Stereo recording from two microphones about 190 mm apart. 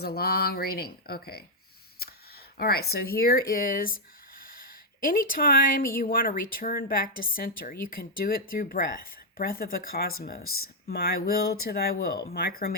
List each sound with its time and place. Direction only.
0.0 s speech: 55° left (ahead or behind)
5.0 s speech: 45° left (ahead or behind)